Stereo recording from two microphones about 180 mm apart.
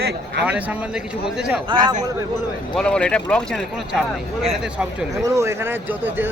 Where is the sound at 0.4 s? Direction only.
5° right (ahead or behind).